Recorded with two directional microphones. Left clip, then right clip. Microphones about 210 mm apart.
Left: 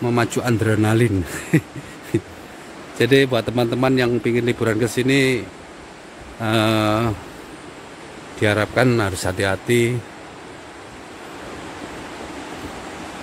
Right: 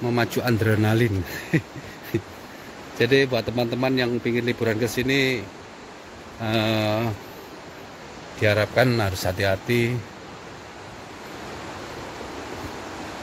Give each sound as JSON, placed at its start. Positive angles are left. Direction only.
{"t": 0.0, "sound": "a man's voice", "side_deg": 15}
{"t": 6.4, "sound": "a man's voice", "side_deg": 20}
{"t": 8.4, "sound": "a man's voice", "side_deg": 20}